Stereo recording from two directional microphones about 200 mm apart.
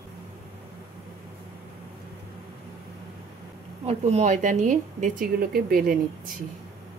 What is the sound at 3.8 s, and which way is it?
A woman's voice, 35° right (ahead or behind).